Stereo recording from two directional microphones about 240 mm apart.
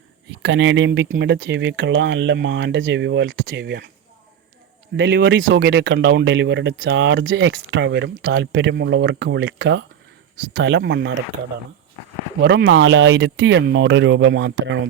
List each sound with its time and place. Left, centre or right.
0.3 s speech: right
4.9 s speech: right
12.4 s speech: right